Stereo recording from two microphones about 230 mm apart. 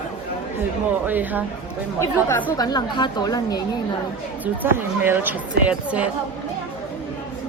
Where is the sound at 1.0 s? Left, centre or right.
Centre.